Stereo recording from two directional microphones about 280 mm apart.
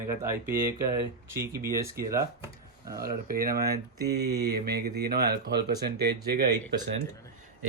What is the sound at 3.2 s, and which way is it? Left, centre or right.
Speech, right.